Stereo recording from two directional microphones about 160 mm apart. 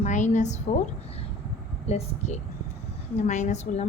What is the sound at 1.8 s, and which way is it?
A woman's voice, 40° left (ahead or behind).